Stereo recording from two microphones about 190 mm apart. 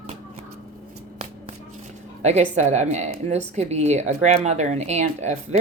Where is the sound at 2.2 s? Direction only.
35° right (ahead or behind).